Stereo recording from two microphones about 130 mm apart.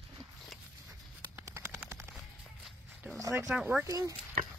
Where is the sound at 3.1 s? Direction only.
25° right (ahead or behind).